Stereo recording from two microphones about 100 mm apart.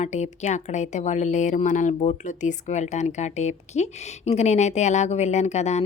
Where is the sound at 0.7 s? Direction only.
90° left.